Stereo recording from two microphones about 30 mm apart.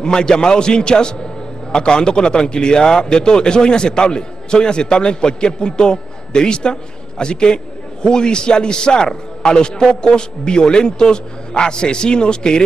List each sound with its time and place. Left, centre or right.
0.0 s a man's voice: left